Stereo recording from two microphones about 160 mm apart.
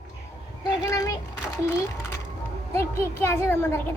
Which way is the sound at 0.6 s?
20° left (ahead or behind).